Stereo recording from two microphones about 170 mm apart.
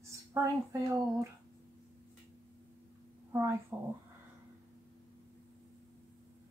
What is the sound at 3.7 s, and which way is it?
Speech, 10° right (ahead or behind).